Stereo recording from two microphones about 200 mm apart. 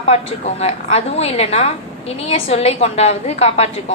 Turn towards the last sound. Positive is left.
turn(degrees=30)  # may be behind; listen again after turning